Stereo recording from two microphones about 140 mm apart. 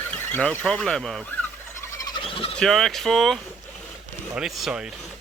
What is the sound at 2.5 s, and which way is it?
Speech, centre (ahead or behind).